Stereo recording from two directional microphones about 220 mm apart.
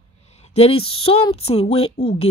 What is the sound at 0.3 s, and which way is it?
A woman's voice, 30° left (ahead or behind).